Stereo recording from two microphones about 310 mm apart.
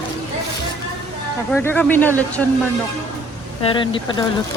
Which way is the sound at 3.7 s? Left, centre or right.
Centre.